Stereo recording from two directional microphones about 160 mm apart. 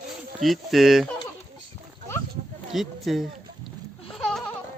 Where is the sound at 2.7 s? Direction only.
Centre (ahead or behind).